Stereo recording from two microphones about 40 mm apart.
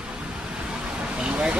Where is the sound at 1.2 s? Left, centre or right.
Right.